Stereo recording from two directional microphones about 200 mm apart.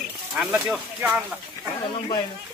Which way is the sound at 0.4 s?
Centre (ahead or behind).